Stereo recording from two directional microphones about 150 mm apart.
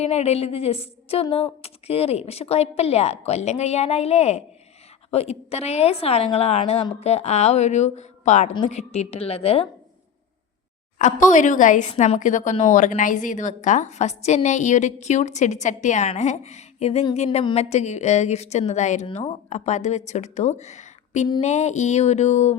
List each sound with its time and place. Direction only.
0.0 s speech: 45° left (ahead or behind)
10.9 s speech: 55° left (ahead or behind)
19.0 s speech: 35° left (ahead or behind)